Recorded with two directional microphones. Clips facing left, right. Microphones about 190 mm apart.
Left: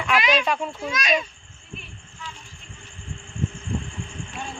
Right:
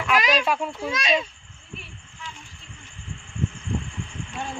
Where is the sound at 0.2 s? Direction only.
35° right (ahead or behind).